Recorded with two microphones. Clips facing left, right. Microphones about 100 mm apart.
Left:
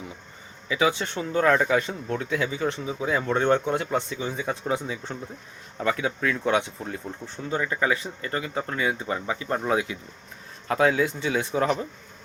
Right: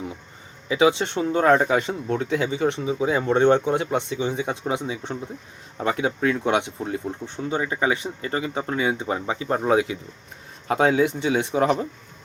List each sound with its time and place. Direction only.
0.7 s speech: 30° right (ahead or behind)